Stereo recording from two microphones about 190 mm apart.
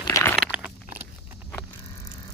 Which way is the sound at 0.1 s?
10° left (ahead or behind).